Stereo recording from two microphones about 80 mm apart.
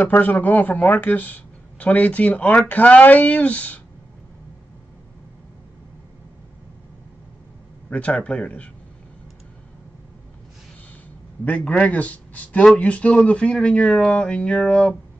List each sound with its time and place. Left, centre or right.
0.0 s speech: left
7.9 s a man's voice: centre
11.4 s a man's voice: centre